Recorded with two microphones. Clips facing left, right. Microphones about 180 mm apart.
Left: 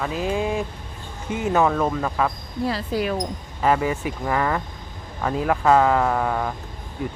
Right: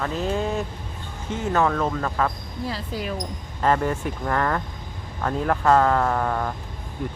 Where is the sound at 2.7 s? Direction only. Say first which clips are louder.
Left 6 dB; 70° left (ahead or behind).